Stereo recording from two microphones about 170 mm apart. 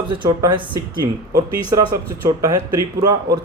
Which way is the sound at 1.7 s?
20° right (ahead or behind).